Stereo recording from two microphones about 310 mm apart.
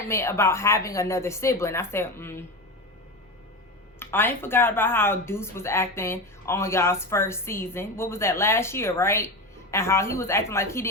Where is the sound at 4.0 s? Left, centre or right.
Centre.